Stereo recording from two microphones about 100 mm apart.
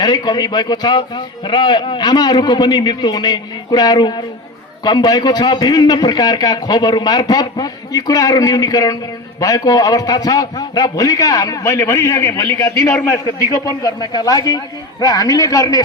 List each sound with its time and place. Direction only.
0.0 s a man's voice: 45° left (ahead or behind)